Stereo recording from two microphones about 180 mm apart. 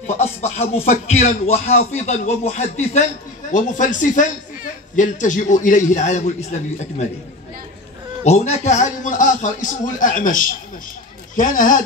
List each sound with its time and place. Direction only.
0.0 s a man's voice: 40° left (ahead or behind)
8.2 s a man's voice: 40° left (ahead or behind)